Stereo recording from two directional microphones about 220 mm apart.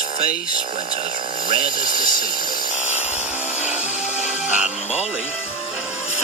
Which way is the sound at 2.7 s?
5° right (ahead or behind).